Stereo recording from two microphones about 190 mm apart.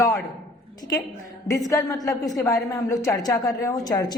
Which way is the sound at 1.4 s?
15° left (ahead or behind).